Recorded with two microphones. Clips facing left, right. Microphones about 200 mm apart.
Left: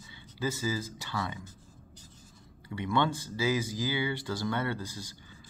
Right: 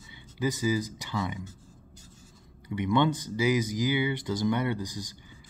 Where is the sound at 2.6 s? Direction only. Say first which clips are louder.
Right 4 dB; 20° right (ahead or behind).